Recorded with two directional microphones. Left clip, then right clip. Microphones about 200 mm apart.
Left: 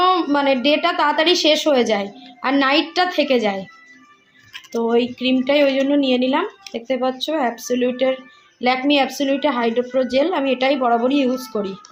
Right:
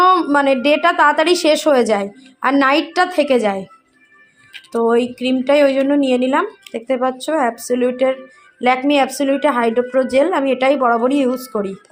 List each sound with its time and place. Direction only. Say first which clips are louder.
0.0 s a woman's voice: right 4 dB; 20° right (ahead or behind)
4.7 s a woman's voice: right 3 dB; 25° right (ahead or behind)